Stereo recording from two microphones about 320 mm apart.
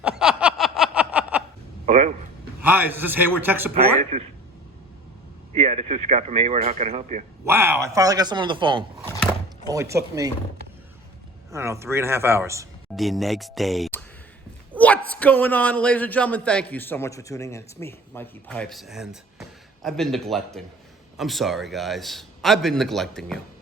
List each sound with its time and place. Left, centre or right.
0.0 s snicker: centre
1.9 s a sound: right
2.6 s a man's voice: centre
4.1 s speech: centre
5.5 s speech: centre
7.4 s a man's voice: centre
11.5 s a man's voice: centre